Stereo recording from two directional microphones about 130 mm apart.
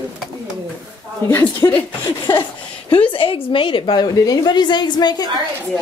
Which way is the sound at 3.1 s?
45° left (ahead or behind).